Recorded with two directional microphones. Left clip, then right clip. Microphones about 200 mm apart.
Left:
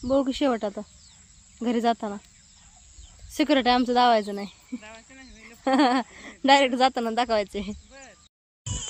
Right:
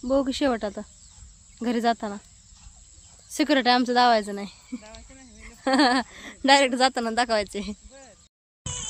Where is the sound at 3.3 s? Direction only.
5° left (ahead or behind).